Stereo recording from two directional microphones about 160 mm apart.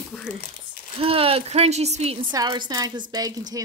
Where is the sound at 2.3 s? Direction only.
25° right (ahead or behind).